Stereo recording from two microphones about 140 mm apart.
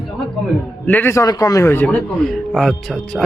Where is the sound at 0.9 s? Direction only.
15° left (ahead or behind).